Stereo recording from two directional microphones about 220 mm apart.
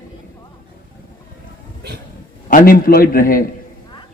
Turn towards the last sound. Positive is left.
turn(degrees=40)  # may be behind; listen again after turning